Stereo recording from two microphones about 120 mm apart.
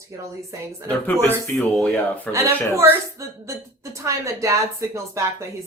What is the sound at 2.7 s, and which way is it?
Speech, 25° right (ahead or behind).